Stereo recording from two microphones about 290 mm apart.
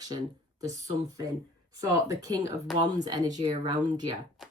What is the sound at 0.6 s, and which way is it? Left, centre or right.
Speech, centre.